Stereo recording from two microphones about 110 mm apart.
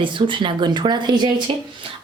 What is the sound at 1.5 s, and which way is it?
Speech, 55° right (ahead or behind).